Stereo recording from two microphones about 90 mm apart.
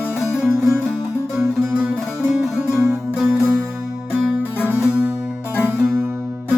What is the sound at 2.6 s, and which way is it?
Music, 30° right (ahead or behind).